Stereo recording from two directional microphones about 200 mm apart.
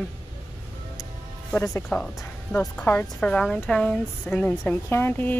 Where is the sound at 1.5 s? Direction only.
10° left (ahead or behind).